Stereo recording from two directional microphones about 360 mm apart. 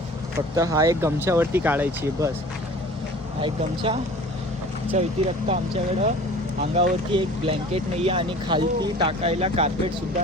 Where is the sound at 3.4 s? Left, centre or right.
Centre.